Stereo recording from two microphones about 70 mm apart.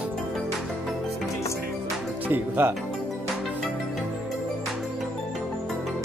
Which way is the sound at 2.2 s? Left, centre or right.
Right.